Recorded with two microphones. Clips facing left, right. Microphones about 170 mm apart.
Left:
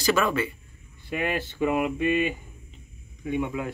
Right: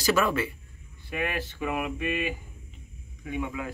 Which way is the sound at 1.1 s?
25° left (ahead or behind).